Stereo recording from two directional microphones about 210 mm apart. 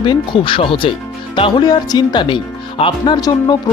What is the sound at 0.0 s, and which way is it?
Speech, 25° left (ahead or behind).